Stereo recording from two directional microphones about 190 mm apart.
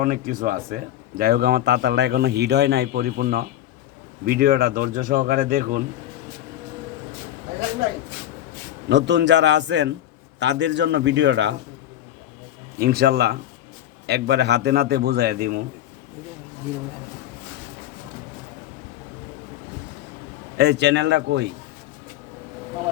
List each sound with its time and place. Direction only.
0.0 s a man's voice: 45° right (ahead or behind)
8.9 s a man's voice: 65° right (ahead or behind)
12.8 s a man's voice: 55° right (ahead or behind)
20.6 s a man's voice: 65° right (ahead or behind)